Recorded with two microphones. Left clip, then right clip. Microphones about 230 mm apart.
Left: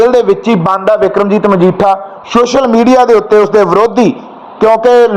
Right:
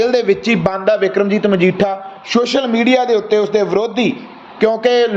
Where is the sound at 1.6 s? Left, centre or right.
Left.